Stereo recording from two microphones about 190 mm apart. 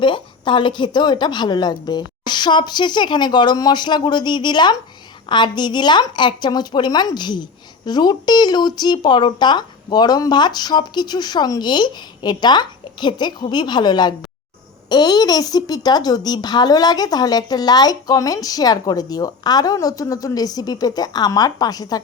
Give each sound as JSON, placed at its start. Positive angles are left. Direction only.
{"t": 0.0, "sound": "speech", "side_deg": 25}